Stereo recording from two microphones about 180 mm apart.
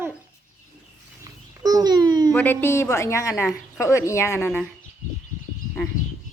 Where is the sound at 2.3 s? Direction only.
10° left (ahead or behind).